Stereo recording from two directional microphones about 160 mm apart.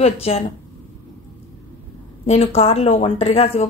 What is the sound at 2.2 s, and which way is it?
A woman's voice, 40° left (ahead or behind).